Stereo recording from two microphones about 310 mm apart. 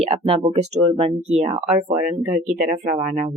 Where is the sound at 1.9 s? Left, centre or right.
Centre.